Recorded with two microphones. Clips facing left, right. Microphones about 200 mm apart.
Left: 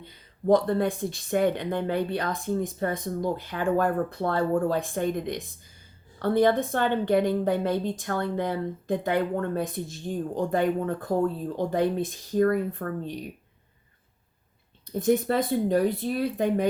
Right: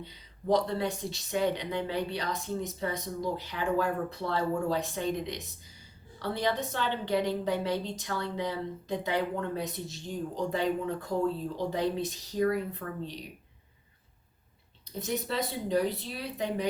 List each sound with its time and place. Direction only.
0.0 s speech: 50° left (ahead or behind)
14.9 s speech: 50° left (ahead or behind)